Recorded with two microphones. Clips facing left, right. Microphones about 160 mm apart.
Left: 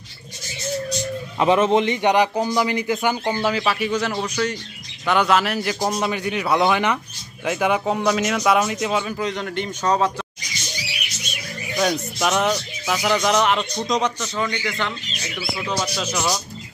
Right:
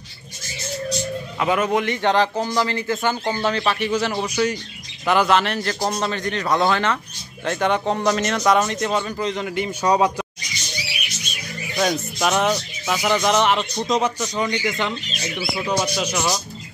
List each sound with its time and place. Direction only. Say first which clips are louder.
1.4 s a man's voice: left 4 dB; 25° left (ahead or behind); by 10.2 s 15° right (ahead or behind)
11.8 s speech: even; centre (ahead or behind)
14.3 s speech: right 2 dB; 20° right (ahead or behind)